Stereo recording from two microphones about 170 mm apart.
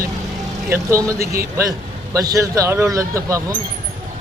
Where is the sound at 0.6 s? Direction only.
15° right (ahead or behind).